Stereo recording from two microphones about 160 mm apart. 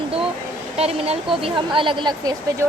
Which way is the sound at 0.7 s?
40° right (ahead or behind).